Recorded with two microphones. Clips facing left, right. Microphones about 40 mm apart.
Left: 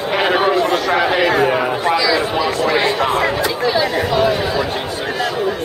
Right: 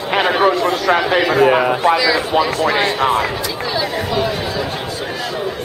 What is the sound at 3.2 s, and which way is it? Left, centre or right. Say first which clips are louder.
Speech: left 3 dB; centre.